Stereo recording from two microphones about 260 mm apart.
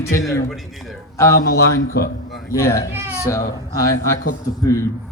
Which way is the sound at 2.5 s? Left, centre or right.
Centre.